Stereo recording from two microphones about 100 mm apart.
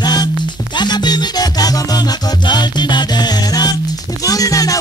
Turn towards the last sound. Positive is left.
turn(degrees=35)  # may be behind; listen again after turning